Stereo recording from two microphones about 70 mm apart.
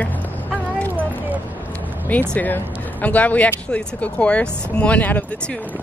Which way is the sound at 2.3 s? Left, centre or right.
Left.